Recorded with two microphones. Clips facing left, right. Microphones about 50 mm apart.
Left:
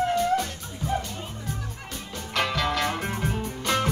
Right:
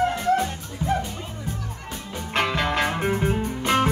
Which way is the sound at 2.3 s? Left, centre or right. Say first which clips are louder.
Right 3 dB; right.